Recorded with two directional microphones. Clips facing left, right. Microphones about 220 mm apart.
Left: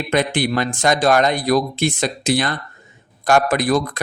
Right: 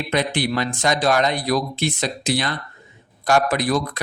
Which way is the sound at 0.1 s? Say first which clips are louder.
Left 3 dB; 50° left (ahead or behind).